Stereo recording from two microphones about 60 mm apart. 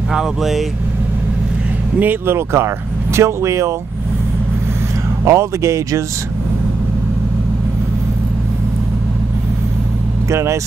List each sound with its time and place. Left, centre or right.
0.1 s speech: centre
2.0 s speech: right
2.3 s speech: right
5.2 s speech: right
10.3 s speech: right